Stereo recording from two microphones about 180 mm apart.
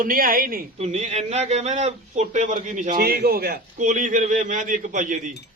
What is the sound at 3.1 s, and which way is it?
A man's voice, 55° right (ahead or behind).